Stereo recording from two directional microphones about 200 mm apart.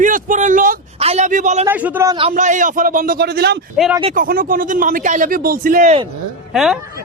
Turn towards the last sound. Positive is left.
turn(degrees=0)  # may be behind; listen again after turning